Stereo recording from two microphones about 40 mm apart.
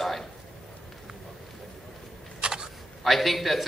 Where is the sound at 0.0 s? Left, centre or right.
Centre.